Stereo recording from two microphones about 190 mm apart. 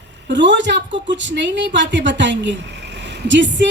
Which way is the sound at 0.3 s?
70° right (ahead or behind).